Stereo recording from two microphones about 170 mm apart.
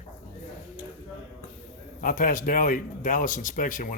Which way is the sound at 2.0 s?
55° left (ahead or behind).